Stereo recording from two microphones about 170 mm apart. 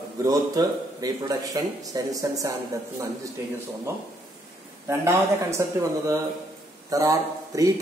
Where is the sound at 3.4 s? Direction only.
15° right (ahead or behind).